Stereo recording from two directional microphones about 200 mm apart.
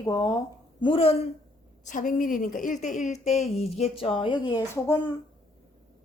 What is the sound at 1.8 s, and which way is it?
A woman's voice, 40° left (ahead or behind).